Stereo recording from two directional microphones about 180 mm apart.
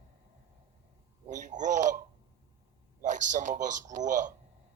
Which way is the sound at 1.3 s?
45° right (ahead or behind).